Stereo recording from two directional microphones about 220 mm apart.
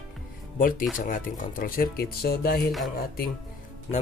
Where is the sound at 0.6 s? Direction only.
40° left (ahead or behind).